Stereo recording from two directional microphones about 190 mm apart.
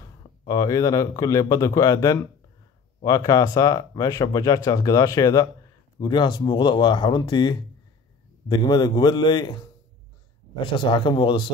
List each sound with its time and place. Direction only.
0.0 s a man's voice: 20° left (ahead or behind)